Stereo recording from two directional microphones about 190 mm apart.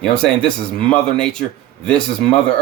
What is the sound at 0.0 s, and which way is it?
Speech, 5° left (ahead or behind).